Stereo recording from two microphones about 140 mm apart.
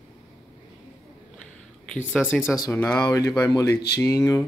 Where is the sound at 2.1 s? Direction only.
10° left (ahead or behind).